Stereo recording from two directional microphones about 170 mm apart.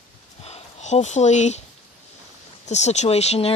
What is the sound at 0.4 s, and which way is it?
Speech, 40° left (ahead or behind).